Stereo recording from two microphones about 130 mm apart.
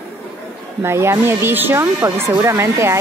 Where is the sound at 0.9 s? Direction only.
20° right (ahead or behind).